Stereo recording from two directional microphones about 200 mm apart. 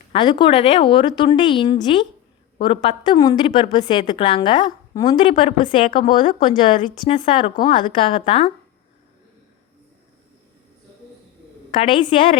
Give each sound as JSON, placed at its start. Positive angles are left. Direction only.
{"t": 0.1, "sound": "a woman's voice", "side_deg": 25}
{"t": 11.8, "sound": "a woman's voice", "side_deg": 25}